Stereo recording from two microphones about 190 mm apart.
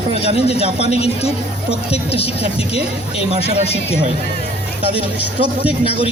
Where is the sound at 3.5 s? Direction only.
30° left (ahead or behind).